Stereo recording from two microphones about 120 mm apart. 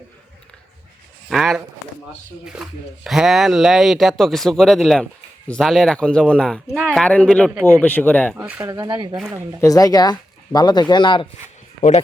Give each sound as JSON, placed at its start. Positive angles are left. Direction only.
{"t": 1.3, "sound": "speech", "side_deg": 0}
{"t": 8.4, "sound": "speech", "side_deg": -15}
{"t": 9.6, "sound": "speech", "side_deg": 30}